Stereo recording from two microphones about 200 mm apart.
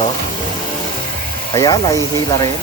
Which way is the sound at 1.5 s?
15° left (ahead or behind).